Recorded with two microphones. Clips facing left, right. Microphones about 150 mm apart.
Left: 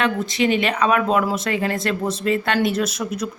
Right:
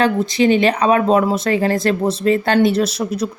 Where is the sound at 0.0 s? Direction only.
35° right (ahead or behind).